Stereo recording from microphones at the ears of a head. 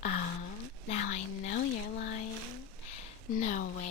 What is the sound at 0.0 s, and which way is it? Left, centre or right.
A woman's voice, left.